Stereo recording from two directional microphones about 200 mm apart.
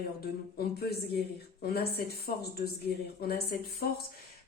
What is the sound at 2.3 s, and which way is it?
Speech, 45° left (ahead or behind).